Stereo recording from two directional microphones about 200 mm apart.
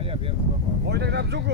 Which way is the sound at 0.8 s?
55° right (ahead or behind).